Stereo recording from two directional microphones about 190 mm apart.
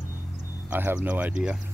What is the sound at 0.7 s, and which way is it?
Speech, 10° right (ahead or behind).